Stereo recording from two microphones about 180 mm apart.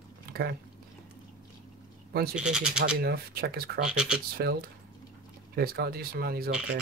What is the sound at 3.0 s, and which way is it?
Speech, 60° right (ahead or behind).